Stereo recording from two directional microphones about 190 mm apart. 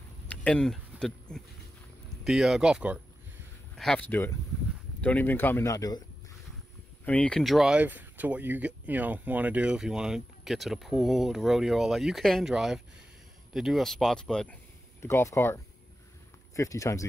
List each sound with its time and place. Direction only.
0.3 s a sound: 5° left (ahead or behind)
2.2 s speech: centre (ahead or behind); by 6.0 s 20° left (ahead or behind)
7.1 s speech: 5° left (ahead or behind)